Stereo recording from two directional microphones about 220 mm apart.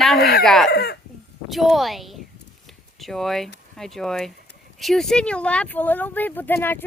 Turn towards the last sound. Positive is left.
turn(degrees=10)  # may be behind; listen again after turning